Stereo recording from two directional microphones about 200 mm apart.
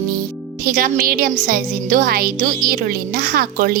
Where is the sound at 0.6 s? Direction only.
45° right (ahead or behind).